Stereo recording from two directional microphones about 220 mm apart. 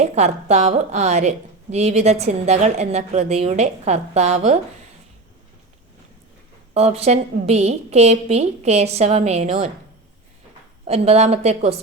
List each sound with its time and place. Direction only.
0.0 s a woman's voice: 30° right (ahead or behind)
6.7 s a woman's voice: 30° right (ahead or behind)
10.8 s a woman's voice: 30° right (ahead or behind)